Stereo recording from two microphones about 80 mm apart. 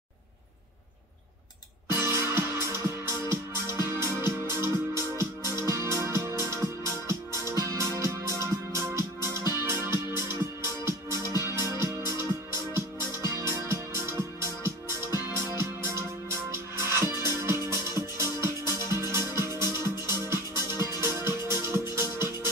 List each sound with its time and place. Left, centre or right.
1.9 s music: right
13.3 s music: right